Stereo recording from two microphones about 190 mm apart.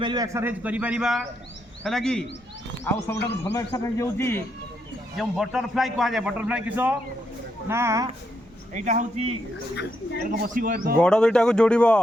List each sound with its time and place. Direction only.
0.0 s a man's voice: 20° right (ahead or behind); by 4.4 s 15° left (ahead or behind)
5.1 s a man's voice: centre (ahead or behind); by 8.1 s 15° right (ahead or behind)
8.7 s a man's voice: 40° right (ahead or behind)
9.7 s speech: 65° left (ahead or behind)
10.4 s speech: 50° right (ahead or behind)
11.0 s a man's voice: 5° left (ahead or behind)